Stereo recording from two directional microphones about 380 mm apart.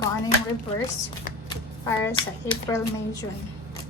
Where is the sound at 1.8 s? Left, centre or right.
Centre.